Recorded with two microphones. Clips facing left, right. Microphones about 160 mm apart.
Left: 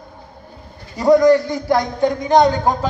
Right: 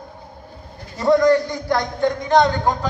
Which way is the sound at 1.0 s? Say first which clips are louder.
Left 3 dB; 20° left (ahead or behind).